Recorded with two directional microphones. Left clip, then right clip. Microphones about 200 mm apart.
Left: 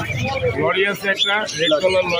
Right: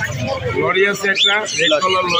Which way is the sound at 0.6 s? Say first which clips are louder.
Right 5 dB; 10° right (ahead or behind).